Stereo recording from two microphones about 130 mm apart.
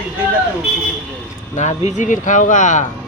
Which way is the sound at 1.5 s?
65° left (ahead or behind).